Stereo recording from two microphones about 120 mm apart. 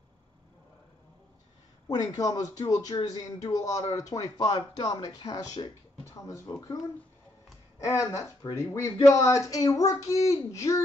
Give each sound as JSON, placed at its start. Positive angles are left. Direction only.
{"t": 1.9, "sound": "speech", "side_deg": 30}
{"t": 6.2, "sound": "speech", "side_deg": 25}
{"t": 7.8, "sound": "speech", "side_deg": 25}